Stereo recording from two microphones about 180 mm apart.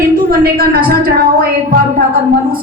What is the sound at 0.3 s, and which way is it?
A woman's voice, 55° right (ahead or behind).